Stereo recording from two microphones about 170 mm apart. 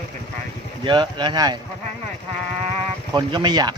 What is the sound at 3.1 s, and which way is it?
Speech, 25° right (ahead or behind).